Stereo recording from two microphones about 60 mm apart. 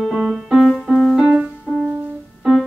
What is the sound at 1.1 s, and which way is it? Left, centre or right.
Music, centre.